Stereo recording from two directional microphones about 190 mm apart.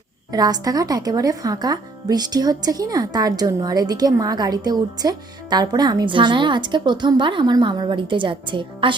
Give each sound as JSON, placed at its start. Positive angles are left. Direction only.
{"t": 0.3, "sound": "speech", "side_deg": -20}